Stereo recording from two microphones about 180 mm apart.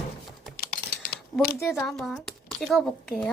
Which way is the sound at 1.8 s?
Centre (ahead or behind).